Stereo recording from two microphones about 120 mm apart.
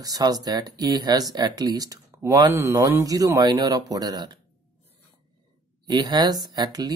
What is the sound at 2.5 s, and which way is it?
Speech, 20° right (ahead or behind).